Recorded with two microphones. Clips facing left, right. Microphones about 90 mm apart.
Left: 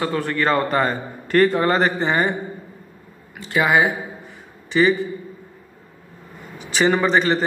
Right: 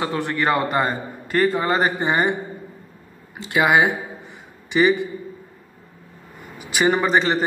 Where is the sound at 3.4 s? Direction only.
20° right (ahead or behind).